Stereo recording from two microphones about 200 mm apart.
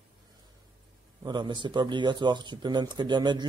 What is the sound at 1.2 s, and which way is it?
Speech, 20° right (ahead or behind).